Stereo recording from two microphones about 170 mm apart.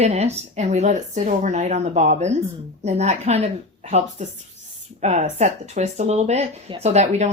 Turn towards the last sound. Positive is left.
turn(degrees=-40)  # may be behind; listen again after turning